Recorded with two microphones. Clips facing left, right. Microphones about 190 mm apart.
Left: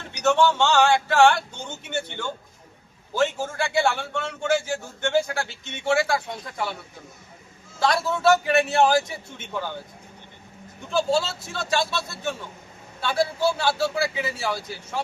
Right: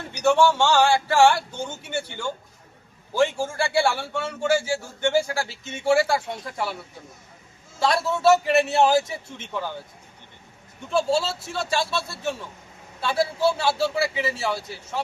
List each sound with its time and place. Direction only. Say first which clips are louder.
0.2 s a man's voice: right 1 dB; 10° right (ahead or behind)
7.8 s speech: even; 5° right (ahead or behind)
10.9 s speech: even; 5° right (ahead or behind)